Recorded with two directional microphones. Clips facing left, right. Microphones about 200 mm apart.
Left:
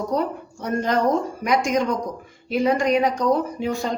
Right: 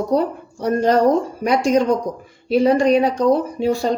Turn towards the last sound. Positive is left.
turn(degrees=-35)  # may be behind; listen again after turning